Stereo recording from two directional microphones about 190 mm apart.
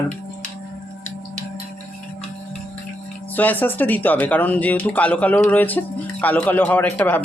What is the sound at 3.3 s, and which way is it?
Speech, 10° left (ahead or behind).